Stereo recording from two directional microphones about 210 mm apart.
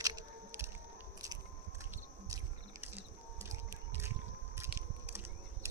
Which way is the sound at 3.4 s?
15° right (ahead or behind).